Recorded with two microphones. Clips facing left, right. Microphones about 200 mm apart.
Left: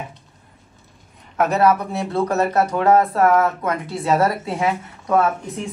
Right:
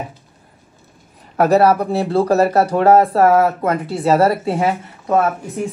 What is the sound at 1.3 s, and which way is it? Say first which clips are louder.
Speech: right 4 dB; 35° right (ahead or behind).